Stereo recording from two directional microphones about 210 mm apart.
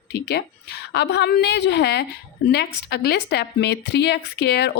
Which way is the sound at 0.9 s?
55° left (ahead or behind).